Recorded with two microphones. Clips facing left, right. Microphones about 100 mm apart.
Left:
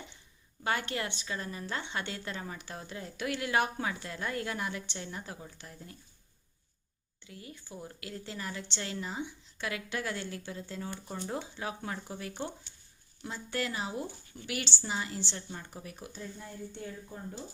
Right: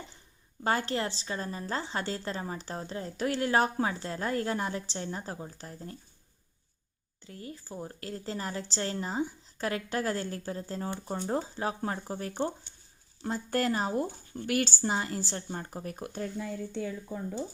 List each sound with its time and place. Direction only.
0.6 s a woman's voice: 35° right (ahead or behind)
7.3 s a woman's voice: 40° right (ahead or behind); by 16.8 s 90° right